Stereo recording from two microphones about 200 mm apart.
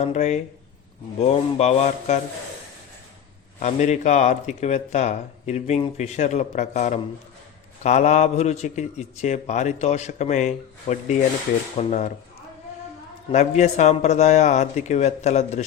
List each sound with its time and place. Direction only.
0.0 s speech: 35° left (ahead or behind)
3.6 s speech: 35° left (ahead or behind)
13.3 s speech: 35° left (ahead or behind)